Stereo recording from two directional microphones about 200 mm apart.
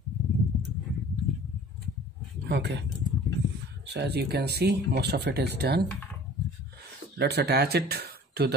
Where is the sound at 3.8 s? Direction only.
55° right (ahead or behind).